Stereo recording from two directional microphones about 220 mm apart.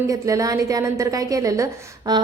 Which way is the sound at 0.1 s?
15° right (ahead or behind).